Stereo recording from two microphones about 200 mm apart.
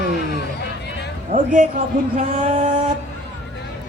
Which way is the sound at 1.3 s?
40° right (ahead or behind).